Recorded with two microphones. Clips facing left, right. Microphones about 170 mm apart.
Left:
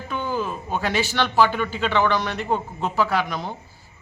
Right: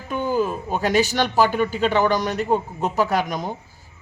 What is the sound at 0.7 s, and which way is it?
A man's voice, 40° right (ahead or behind).